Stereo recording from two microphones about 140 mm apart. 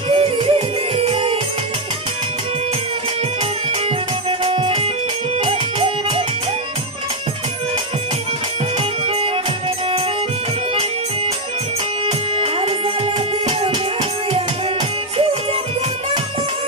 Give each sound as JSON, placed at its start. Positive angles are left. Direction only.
{"t": 0.1, "sound": "music", "side_deg": -40}
{"t": 4.3, "sound": "music", "side_deg": -40}
{"t": 8.7, "sound": "music", "side_deg": -45}
{"t": 12.1, "sound": "music", "side_deg": -45}